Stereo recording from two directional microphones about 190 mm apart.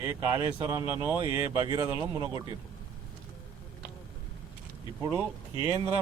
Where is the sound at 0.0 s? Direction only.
20° right (ahead or behind).